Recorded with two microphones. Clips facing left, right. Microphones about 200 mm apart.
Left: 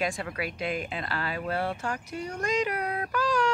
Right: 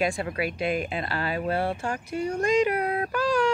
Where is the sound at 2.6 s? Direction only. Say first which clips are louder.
Right 5 dB; 25° right (ahead or behind).